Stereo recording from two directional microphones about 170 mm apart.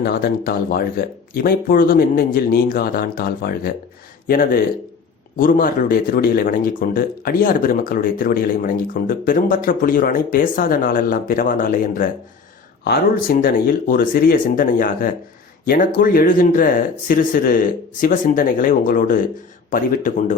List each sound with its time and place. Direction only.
0.0 s speech: 60° left (ahead or behind)